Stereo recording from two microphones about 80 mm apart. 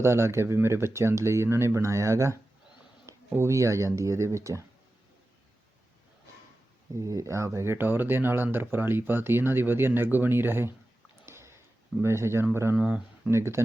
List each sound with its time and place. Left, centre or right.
0.0 s speech: right
7.0 s speech: right
11.3 s a sound: right
12.0 s speech: right
12.7 s speech: centre
13.3 s speech: right